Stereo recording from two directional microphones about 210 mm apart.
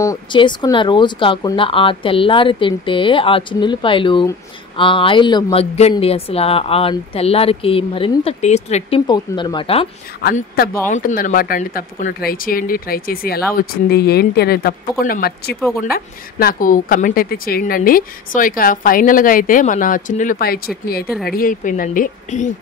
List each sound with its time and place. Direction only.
0.0 s speech: 20° left (ahead or behind)
9.0 s speech: 20° left (ahead or behind)
10.3 s speech: 45° left (ahead or behind)